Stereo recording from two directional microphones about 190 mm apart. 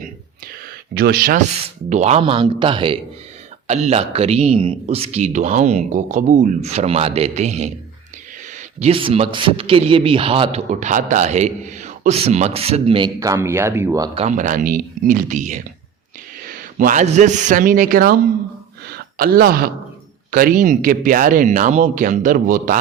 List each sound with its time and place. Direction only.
0.9 s speech: 55° right (ahead or behind)
1.9 s a man's voice: 35° right (ahead or behind)
13.1 s speech: 15° right (ahead or behind)
14.2 s a man's voice: 40° right (ahead or behind)